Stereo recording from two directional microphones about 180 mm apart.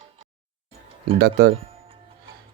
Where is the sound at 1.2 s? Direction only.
65° right (ahead or behind).